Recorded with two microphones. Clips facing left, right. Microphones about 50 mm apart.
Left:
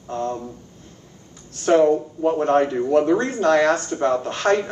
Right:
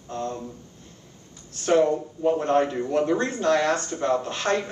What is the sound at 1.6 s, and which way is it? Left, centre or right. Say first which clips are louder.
Speech: left 4 dB; left.